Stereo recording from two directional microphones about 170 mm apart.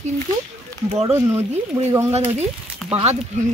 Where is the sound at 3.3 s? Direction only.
40° right (ahead or behind).